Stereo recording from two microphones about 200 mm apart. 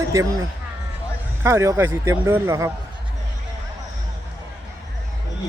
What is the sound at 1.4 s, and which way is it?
Speech, 15° right (ahead or behind).